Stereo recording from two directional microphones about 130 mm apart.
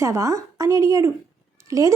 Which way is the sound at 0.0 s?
25° right (ahead or behind).